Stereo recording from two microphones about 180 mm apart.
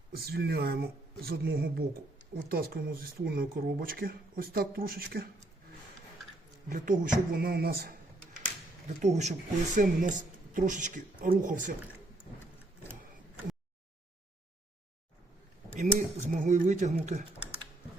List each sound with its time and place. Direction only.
0.1 s speech: 60° right (ahead or behind)
6.7 s speech: 50° right (ahead or behind)
9.0 s speech: 40° right (ahead or behind)
15.7 s speech: 45° right (ahead or behind)